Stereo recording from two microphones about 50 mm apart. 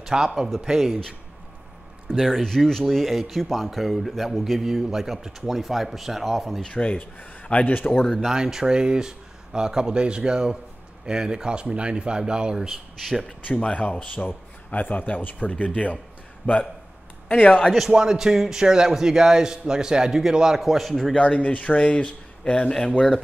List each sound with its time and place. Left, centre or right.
0.0 s a man's voice: centre
2.1 s a man's voice: centre
6.7 s a man's voice: left
8.0 s a man's voice: centre
8.3 s a man's voice: centre
13.2 s a man's voice: left
17.9 s a man's voice: centre
20.6 s a man's voice: centre
21.1 s speech: left